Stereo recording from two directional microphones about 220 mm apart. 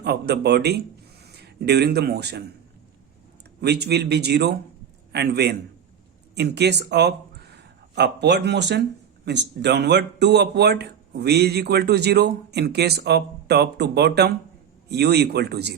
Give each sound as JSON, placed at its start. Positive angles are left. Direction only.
{"t": 0.0, "sound": "speech", "side_deg": -50}
{"t": 3.6, "sound": "speech", "side_deg": -50}